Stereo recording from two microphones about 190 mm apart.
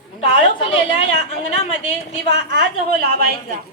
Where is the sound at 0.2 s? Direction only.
30° left (ahead or behind).